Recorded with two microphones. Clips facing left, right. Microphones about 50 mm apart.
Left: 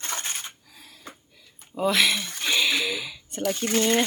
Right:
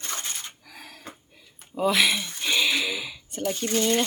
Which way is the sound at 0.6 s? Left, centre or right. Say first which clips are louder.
Right 5 dB; right.